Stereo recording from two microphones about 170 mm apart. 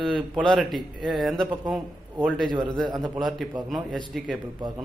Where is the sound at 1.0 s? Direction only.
Centre (ahead or behind).